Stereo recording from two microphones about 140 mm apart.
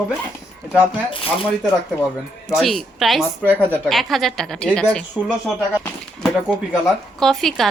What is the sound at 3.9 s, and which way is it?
A woman's voice, centre (ahead or behind).